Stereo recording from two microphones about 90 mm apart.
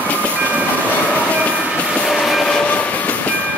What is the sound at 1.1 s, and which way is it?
Train, 15° left (ahead or behind).